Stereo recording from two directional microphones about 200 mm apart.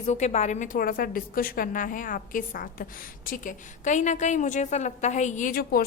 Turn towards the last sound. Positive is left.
turn(degrees=45)  # may be behind; listen again after turning